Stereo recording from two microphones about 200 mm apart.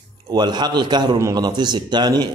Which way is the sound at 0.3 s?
20° right (ahead or behind).